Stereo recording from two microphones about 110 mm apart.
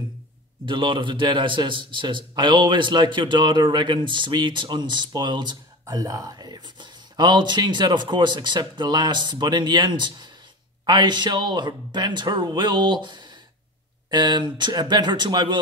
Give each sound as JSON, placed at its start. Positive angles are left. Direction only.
{"t": 0.7, "sound": "a man's voice", "side_deg": -50}